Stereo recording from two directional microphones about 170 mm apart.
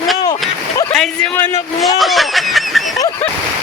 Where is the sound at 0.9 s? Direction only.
5° left (ahead or behind).